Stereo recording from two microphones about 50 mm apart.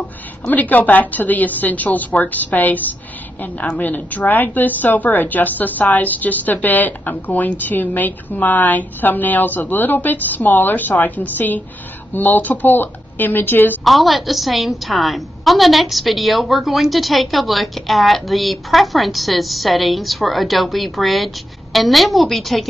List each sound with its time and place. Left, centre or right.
0.5 s a woman's voice: left
3.8 s a woman's voice: left
13.8 s a woman's voice: centre